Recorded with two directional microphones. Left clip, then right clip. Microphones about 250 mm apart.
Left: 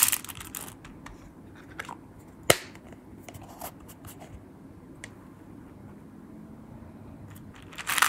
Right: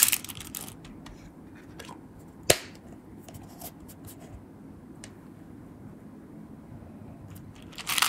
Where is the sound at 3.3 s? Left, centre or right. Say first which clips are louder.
Left 5 dB; centre.